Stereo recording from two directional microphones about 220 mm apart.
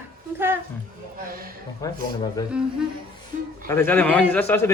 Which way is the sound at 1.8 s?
20° left (ahead or behind).